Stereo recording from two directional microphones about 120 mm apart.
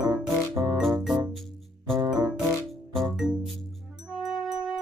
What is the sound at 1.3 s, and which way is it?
Music, centre (ahead or behind).